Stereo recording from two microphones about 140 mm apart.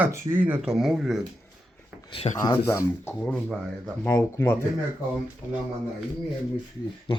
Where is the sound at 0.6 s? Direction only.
Centre (ahead or behind).